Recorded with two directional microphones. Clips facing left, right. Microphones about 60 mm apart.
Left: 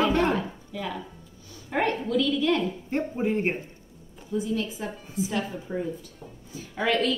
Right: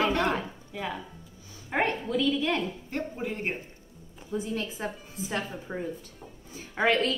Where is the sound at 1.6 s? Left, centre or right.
Right.